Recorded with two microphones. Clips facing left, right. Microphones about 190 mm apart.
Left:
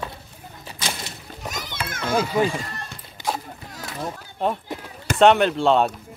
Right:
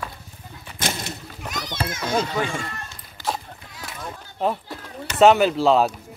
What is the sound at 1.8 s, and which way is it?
Children playing, 55° left (ahead or behind).